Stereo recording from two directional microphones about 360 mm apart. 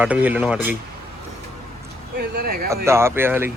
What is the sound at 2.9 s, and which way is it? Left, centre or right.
Speech, centre.